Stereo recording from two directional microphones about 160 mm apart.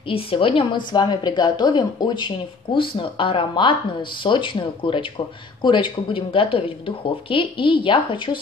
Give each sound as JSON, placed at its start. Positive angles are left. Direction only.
{"t": 0.1, "sound": "a woman's voice", "side_deg": 35}